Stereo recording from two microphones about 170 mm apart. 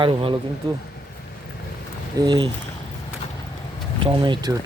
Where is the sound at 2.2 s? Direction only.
25° right (ahead or behind).